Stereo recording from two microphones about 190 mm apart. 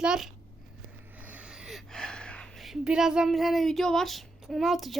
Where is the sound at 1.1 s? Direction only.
10° right (ahead or behind).